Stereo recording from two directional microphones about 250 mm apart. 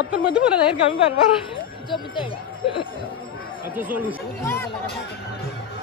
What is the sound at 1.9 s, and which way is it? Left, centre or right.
Speech, centre.